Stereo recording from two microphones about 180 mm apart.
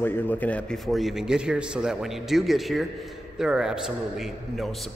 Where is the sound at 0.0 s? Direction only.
10° left (ahead or behind).